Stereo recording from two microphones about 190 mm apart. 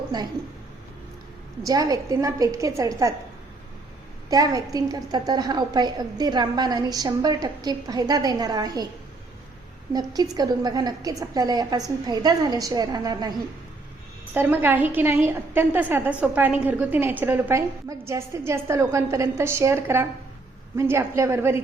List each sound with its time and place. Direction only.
0.1 s a woman's voice: 20° right (ahead or behind)
1.6 s a woman's voice: 20° right (ahead or behind)
4.3 s a woman's voice: 20° right (ahead or behind)
9.9 s a woman's voice: 20° right (ahead or behind)
14.3 s a woman's voice: 10° right (ahead or behind)